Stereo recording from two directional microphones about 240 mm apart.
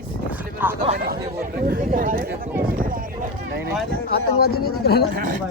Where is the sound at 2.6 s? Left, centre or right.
Right.